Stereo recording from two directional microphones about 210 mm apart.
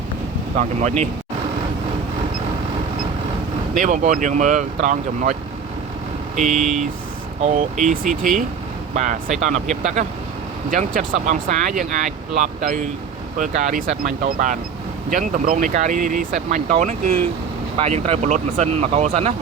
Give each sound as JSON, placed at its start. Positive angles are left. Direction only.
{"t": 0.8, "sound": "speech", "side_deg": -30}
{"t": 3.8, "sound": "speech", "side_deg": -35}
{"t": 6.5, "sound": "speech", "side_deg": 0}
{"t": 7.4, "sound": "speech", "side_deg": -35}
{"t": 9.0, "sound": "speech", "side_deg": -35}
{"t": 14.0, "sound": "speech", "side_deg": -40}